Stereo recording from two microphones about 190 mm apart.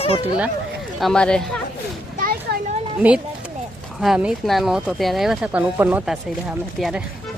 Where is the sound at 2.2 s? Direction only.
55° right (ahead or behind).